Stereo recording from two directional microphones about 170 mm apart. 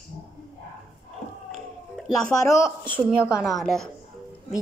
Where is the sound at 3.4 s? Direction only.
Centre (ahead or behind).